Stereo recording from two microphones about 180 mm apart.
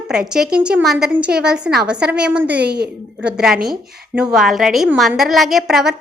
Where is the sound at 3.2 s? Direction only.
5° right (ahead or behind).